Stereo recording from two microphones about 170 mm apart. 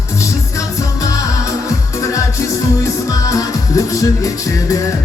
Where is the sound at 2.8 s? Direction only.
20° left (ahead or behind).